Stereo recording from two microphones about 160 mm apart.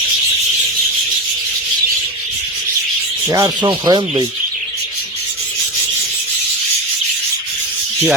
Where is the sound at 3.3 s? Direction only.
25° right (ahead or behind).